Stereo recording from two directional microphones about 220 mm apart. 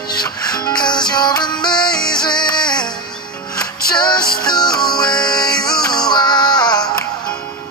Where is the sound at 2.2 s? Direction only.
20° left (ahead or behind).